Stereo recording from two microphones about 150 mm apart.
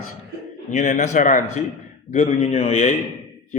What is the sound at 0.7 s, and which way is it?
A man's voice, 50° left (ahead or behind).